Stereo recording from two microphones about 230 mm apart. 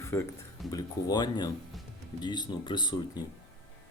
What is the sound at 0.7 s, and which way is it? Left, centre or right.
Speech, centre.